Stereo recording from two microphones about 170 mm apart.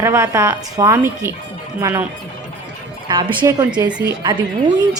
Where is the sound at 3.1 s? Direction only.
25° right (ahead or behind).